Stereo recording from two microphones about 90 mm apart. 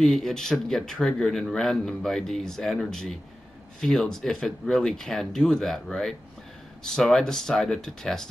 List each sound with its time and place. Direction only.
0.0 s a man's voice: 5° left (ahead or behind)